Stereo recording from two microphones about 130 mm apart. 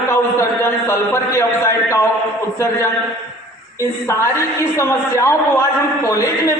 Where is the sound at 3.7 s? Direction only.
20° left (ahead or behind).